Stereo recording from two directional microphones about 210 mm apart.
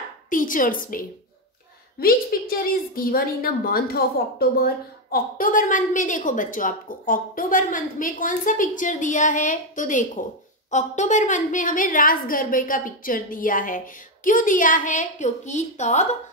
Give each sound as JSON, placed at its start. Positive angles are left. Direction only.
{"t": 0.3, "sound": "a woman's voice", "side_deg": 40}